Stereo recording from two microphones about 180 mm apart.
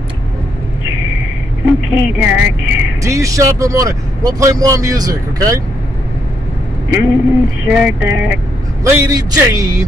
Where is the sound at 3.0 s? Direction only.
15° right (ahead or behind).